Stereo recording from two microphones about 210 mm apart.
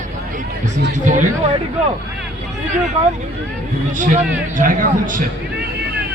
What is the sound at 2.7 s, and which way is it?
Speech, 35° right (ahead or behind).